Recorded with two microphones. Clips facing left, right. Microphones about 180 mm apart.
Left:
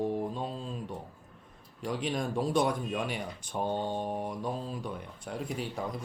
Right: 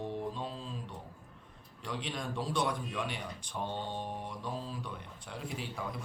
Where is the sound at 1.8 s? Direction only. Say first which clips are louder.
Left 7 dB; 50° left (ahead or behind).